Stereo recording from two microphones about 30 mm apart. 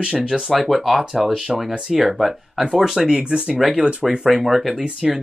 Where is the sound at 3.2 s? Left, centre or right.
Right.